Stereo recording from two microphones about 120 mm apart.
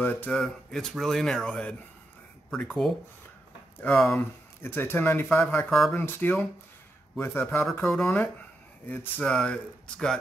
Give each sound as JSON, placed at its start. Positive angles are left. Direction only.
{"t": 0.0, "sound": "speech", "side_deg": 15}
{"t": 0.4, "sound": "speech", "side_deg": 5}
{"t": 4.2, "sound": "speech", "side_deg": 15}
{"t": 5.7, "sound": "speech", "side_deg": 5}
{"t": 5.9, "sound": "speech", "side_deg": 20}